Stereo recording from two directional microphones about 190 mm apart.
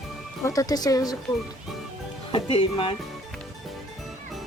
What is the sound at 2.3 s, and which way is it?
Speech, 30° left (ahead or behind).